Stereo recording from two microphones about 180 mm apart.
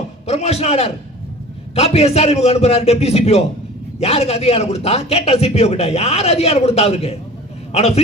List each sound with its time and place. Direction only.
0.3 s a man's voice: 35° left (ahead or behind)